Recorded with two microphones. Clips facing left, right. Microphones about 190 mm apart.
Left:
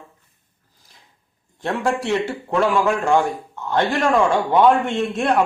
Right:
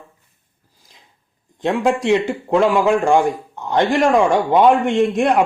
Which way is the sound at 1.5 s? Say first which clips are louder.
Right 4 dB; 15° right (ahead or behind).